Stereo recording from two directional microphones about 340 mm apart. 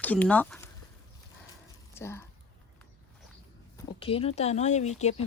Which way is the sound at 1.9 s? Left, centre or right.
Centre.